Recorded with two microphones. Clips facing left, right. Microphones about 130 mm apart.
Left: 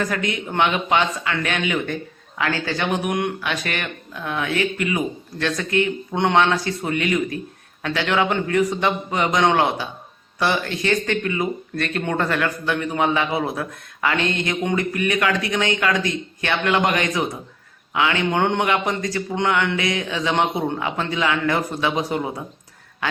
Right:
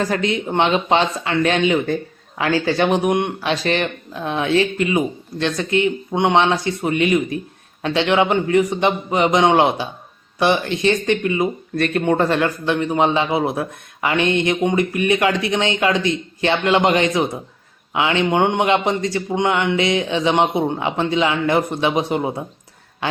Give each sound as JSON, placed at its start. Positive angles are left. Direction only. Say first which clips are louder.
{"t": 0.0, "sound": "a man's voice", "louder": "right 4 dB", "side_deg": -30}